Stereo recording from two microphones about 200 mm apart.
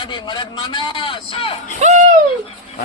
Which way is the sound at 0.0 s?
25° left (ahead or behind).